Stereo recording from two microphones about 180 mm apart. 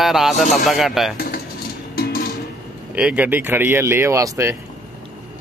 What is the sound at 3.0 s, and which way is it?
Speech, 5° right (ahead or behind).